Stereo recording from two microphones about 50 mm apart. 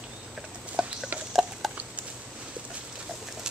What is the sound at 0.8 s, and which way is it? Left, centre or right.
Rodents, centre.